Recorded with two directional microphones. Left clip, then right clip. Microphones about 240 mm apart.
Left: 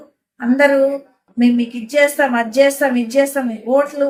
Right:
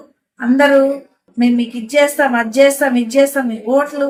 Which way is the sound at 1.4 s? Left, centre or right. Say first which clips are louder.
Even; centre.